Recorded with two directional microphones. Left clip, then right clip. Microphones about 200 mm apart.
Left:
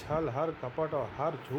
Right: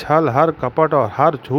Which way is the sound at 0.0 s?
50° right (ahead or behind).